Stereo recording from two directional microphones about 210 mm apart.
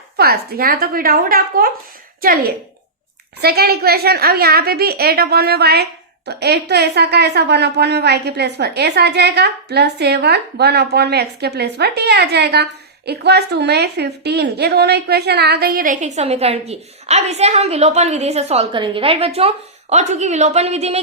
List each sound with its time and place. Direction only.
0.2 s a woman's voice: 45° right (ahead or behind); by 21.0 s 30° right (ahead or behind)